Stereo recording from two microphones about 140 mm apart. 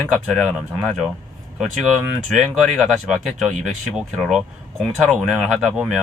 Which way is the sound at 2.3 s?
Centre (ahead or behind).